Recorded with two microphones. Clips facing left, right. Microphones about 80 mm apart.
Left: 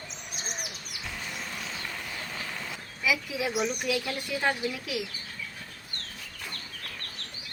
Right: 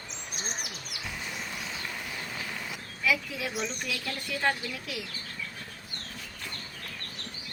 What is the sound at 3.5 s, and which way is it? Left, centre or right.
Speech, centre.